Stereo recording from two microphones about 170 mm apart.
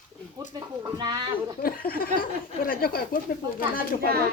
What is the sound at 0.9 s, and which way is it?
Speech, 25° right (ahead or behind).